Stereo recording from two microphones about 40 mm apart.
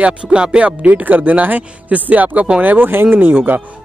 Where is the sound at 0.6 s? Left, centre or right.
Right.